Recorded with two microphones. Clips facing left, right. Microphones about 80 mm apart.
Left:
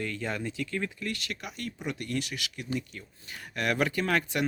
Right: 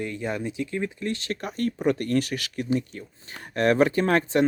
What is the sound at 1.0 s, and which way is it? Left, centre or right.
Speech, right.